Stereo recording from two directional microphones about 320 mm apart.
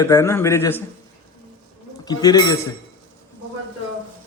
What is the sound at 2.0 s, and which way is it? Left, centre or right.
Speech, centre.